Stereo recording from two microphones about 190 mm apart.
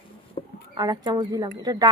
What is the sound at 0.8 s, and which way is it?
A woman's voice, 20° right (ahead or behind).